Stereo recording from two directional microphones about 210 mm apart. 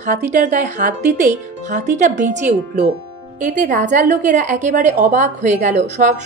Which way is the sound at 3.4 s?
40° right (ahead or behind).